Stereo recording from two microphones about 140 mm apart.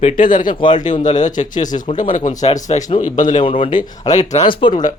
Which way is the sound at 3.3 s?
35° left (ahead or behind).